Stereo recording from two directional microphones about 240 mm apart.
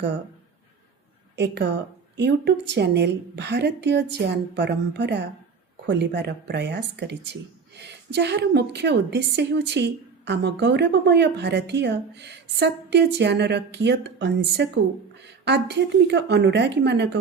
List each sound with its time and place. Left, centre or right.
1.4 s a woman's voice: right